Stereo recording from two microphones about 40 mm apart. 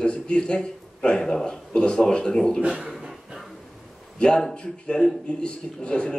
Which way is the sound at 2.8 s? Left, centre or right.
Centre.